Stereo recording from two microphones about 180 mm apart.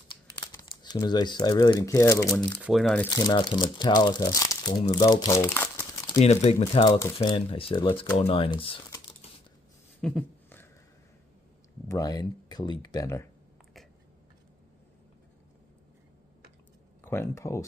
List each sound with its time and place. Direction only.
0.1 s speech: 25° left (ahead or behind)
2.6 s speech: centre (ahead or behind)
3.1 s speech: 20° left (ahead or behind)
6.1 s speech: 35° left (ahead or behind)
10.0 s a sound: 10° left (ahead or behind)
11.9 s speech: 20° left (ahead or behind)
17.0 s speech: 15° left (ahead or behind)